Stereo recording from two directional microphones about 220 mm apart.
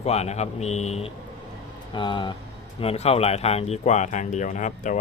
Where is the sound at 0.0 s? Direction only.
30° left (ahead or behind).